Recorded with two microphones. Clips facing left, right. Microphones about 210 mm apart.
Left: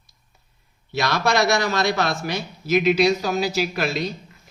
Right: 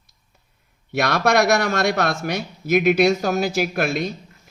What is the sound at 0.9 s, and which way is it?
Speech, 55° right (ahead or behind).